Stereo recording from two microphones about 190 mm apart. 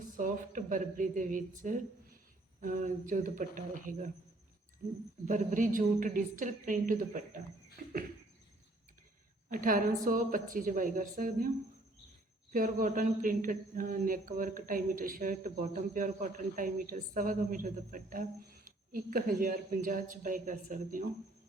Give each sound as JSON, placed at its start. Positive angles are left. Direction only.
{"t": 0.0, "sound": "speech", "side_deg": -45}
{"t": 5.2, "sound": "speech", "side_deg": -40}
{"t": 9.5, "sound": "speech", "side_deg": -45}
{"t": 12.5, "sound": "speech", "side_deg": -50}